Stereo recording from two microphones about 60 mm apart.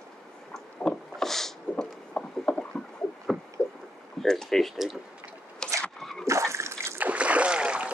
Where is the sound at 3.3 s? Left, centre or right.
Centre.